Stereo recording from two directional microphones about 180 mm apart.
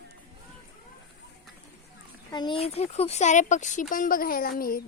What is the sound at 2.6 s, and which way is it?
A woman's voice, 35° left (ahead or behind).